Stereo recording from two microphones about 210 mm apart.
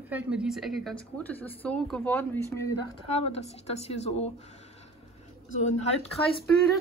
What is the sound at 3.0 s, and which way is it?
A woman's voice, 30° left (ahead or behind).